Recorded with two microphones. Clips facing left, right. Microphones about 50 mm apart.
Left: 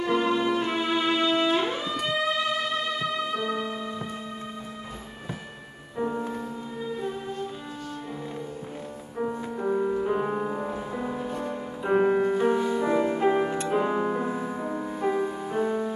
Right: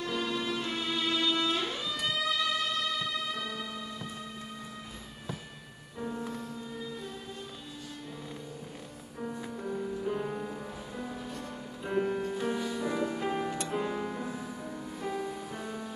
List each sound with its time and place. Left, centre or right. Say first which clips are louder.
0.0 s music: left 9 dB; left
5.9 s music: left 8 dB; left
9.2 s music: left 9 dB; left
10.1 s music: left 8 dB; left